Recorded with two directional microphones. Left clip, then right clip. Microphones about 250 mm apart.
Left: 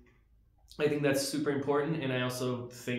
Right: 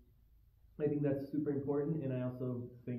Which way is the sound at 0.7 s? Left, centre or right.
Centre.